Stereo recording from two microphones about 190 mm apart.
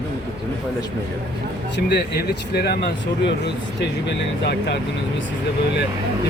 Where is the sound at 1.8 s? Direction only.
60° left (ahead or behind).